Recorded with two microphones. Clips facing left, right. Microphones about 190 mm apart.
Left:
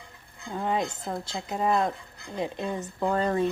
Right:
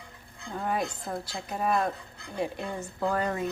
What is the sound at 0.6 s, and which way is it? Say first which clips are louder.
A woman's voice: left 2 dB; 20° left (ahead or behind).